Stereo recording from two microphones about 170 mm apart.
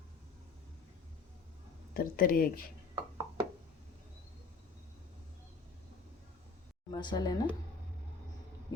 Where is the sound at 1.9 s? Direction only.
60° left (ahead or behind).